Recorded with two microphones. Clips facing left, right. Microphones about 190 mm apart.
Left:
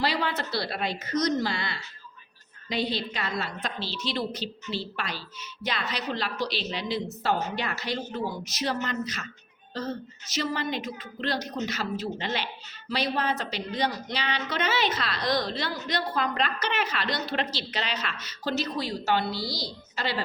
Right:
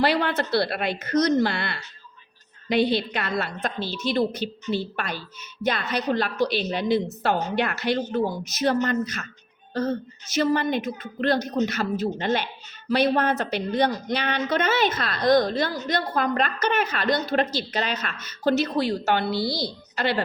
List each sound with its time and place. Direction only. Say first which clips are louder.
0.0 s a woman's voice: right 6 dB; 60° right (ahead or behind)